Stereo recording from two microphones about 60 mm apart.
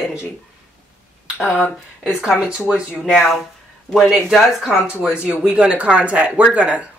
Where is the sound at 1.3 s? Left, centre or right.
Centre.